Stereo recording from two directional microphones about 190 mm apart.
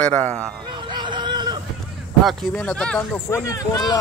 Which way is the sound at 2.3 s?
5° left (ahead or behind).